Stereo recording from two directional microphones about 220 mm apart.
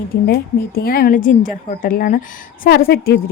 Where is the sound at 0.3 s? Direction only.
40° left (ahead or behind).